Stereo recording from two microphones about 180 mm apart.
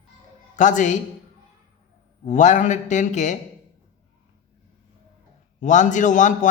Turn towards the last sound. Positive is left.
turn(degrees=45)  # may be behind; listen again after turning